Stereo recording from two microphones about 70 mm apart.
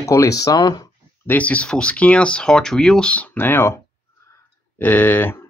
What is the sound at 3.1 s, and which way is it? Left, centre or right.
Speech, centre.